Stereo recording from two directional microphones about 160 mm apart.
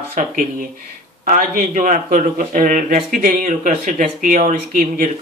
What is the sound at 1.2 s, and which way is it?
A man's voice, 60° right (ahead or behind).